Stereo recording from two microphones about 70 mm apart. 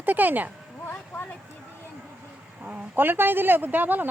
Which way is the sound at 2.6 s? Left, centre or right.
Right.